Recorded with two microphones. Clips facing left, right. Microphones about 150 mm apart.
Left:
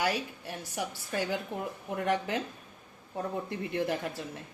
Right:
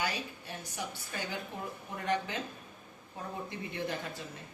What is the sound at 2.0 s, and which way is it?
Speech, 70° left (ahead or behind).